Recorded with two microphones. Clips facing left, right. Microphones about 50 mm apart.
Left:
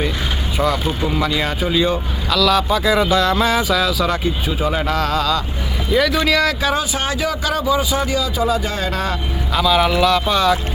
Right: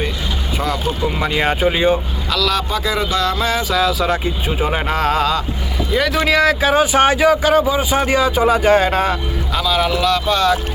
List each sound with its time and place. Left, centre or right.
1.2 s speech: right
2.3 s speech: centre
4.4 s speech: right
5.9 s speech: centre
6.7 s speech: right
8.9 s speech: right
9.6 s speech: centre